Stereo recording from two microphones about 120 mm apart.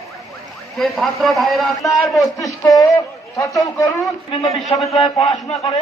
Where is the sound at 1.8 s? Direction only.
25° left (ahead or behind).